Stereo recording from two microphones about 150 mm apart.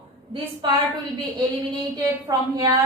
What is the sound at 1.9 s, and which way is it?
Speech, 25° right (ahead or behind).